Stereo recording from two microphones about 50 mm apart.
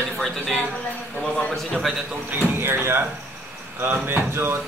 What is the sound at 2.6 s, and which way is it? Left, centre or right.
Speech, right.